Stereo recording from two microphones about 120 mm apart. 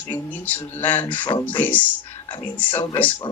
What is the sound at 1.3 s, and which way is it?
Speech, 40° left (ahead or behind).